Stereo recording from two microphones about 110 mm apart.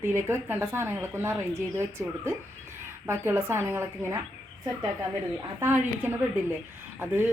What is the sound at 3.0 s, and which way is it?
Speech, 25° right (ahead or behind).